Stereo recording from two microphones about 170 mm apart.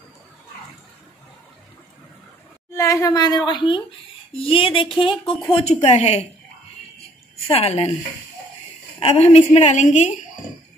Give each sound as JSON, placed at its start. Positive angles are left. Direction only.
{"t": 2.7, "sound": "a woman's voice", "side_deg": 15}
{"t": 7.4, "sound": "speech", "side_deg": 35}
{"t": 9.0, "sound": "speech", "side_deg": 40}